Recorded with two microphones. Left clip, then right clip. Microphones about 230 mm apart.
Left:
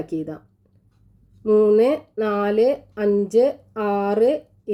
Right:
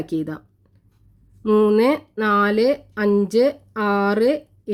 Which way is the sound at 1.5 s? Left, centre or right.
Right.